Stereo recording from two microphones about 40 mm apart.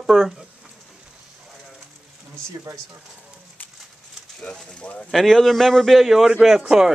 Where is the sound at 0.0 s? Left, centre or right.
Centre.